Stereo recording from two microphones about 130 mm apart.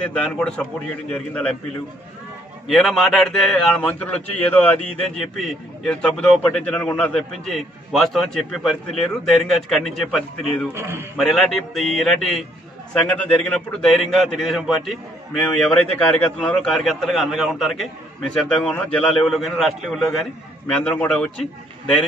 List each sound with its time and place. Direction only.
0.0 s a man's voice: 10° left (ahead or behind)
2.7 s a man's voice: 5° left (ahead or behind)
10.7 s a man's voice: 20° right (ahead or behind)
11.1 s a man's voice: centre (ahead or behind)